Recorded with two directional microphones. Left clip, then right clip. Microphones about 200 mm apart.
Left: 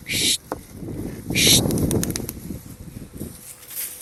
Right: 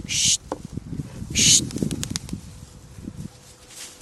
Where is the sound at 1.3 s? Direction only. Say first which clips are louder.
Left 1 dB; centre (ahead or behind).